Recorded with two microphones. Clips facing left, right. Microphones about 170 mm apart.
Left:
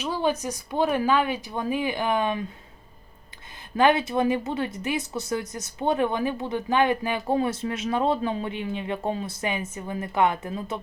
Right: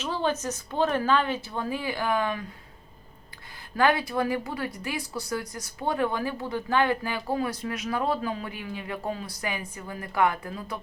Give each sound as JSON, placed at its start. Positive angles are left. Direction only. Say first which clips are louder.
{"t": 0.0, "sound": "speech", "louder": "left 2 dB", "side_deg": 10}
{"t": 3.8, "sound": "speech", "louder": "left 3 dB", "side_deg": 20}